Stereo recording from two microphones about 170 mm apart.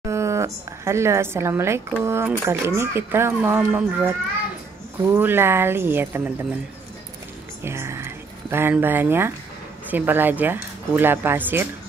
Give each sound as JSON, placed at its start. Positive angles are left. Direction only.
{"t": 0.0, "sound": "a woman's voice", "side_deg": -15}
{"t": 7.6, "sound": "speech", "side_deg": -15}